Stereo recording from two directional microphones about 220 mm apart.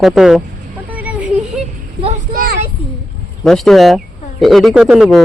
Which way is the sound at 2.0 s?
30° right (ahead or behind).